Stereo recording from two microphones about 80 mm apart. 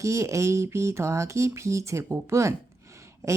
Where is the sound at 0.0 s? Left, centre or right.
Right.